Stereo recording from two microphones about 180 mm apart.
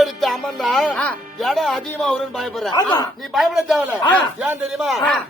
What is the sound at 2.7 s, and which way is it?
Speech, 25° left (ahead or behind).